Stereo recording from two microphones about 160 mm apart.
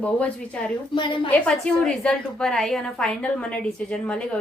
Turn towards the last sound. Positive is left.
turn(degrees=5)  # may be behind; listen again after turning